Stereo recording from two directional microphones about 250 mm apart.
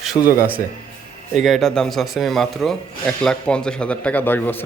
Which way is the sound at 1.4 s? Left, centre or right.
Centre.